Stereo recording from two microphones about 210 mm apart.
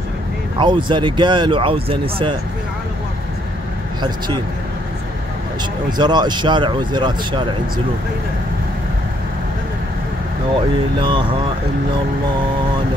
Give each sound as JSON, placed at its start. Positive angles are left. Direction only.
{"t": 0.6, "sound": "speech", "side_deg": -20}
{"t": 5.9, "sound": "speech", "side_deg": -20}
{"t": 11.0, "sound": "speech", "side_deg": -25}